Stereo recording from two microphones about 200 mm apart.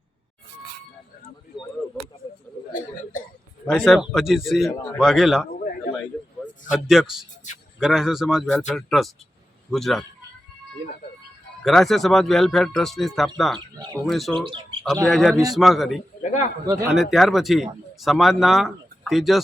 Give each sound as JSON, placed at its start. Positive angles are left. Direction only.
{"t": 2.7, "sound": "a sound", "side_deg": 40}
{"t": 3.7, "sound": "speech", "side_deg": 0}
{"t": 6.7, "sound": "speech", "side_deg": 0}
{"t": 11.6, "sound": "speech", "side_deg": 0}
{"t": 13.7, "sound": "speech", "side_deg": -20}
{"t": 14.0, "sound": "speech", "side_deg": 0}
{"t": 14.3, "sound": "speech", "side_deg": -25}
{"t": 15.0, "sound": "speech", "side_deg": 0}
{"t": 16.2, "sound": "a man's voice", "side_deg": 35}
{"t": 16.9, "sound": "speech", "side_deg": 0}